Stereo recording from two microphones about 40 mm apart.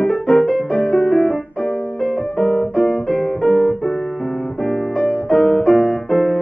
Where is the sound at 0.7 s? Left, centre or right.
Centre.